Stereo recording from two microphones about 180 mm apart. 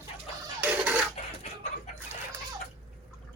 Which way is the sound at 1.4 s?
40° left (ahead or behind).